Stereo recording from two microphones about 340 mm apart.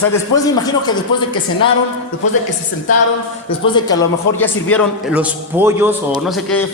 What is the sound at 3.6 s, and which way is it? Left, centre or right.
A man's voice, centre.